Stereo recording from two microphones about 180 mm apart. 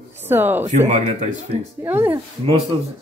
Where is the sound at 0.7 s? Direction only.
40° right (ahead or behind).